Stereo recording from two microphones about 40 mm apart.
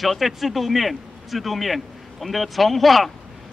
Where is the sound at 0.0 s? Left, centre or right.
Centre.